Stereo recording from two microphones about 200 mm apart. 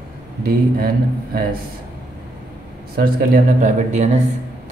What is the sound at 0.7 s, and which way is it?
Speech, 50° right (ahead or behind).